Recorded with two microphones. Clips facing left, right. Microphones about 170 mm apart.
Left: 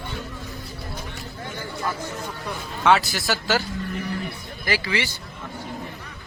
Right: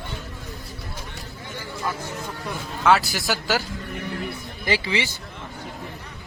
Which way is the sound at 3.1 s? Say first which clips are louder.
Left 1 dB; 15° right (ahead or behind).